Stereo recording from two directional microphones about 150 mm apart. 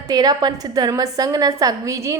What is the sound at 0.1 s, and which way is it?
A woman's voice, 25° right (ahead or behind).